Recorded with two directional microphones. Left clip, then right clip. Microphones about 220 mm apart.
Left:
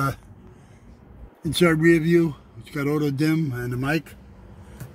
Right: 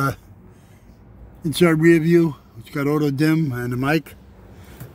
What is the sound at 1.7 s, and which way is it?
A man's voice, 20° right (ahead or behind).